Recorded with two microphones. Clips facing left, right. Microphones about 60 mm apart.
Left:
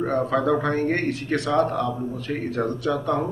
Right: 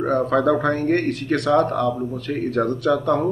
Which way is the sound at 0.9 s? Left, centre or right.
Right.